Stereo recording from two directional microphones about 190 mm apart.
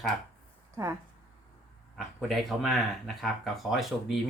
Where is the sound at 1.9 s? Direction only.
Centre (ahead or behind).